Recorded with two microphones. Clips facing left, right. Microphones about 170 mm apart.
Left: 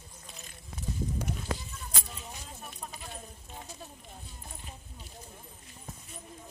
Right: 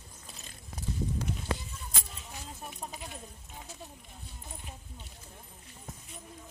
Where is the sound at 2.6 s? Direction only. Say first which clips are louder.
Right 2 dB; 15° right (ahead or behind).